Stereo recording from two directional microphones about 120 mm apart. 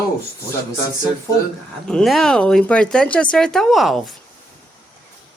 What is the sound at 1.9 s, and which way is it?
Speech, centre (ahead or behind).